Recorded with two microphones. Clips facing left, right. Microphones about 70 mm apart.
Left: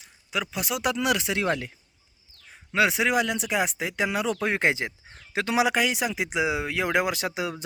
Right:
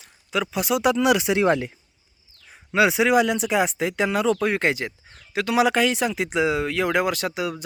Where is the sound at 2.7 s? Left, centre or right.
Centre.